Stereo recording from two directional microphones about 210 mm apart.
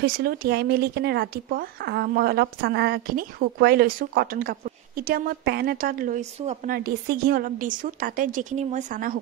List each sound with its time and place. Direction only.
0.0 s speech: 45° right (ahead or behind)